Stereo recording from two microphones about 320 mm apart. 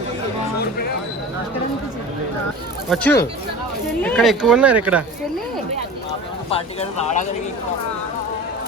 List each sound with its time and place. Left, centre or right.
2.9 s speech: centre
6.5 s speech: centre